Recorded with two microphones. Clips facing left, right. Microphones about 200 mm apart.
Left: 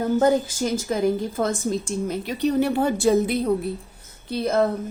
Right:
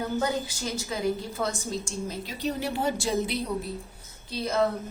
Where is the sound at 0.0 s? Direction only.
50° left (ahead or behind).